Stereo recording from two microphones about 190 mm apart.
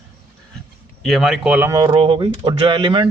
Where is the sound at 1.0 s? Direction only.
Centre (ahead or behind).